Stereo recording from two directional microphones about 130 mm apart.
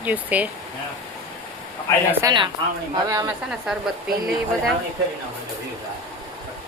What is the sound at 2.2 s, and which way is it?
Speech, 25° right (ahead or behind).